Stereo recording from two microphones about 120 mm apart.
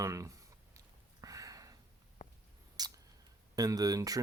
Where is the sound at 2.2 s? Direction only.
90° left.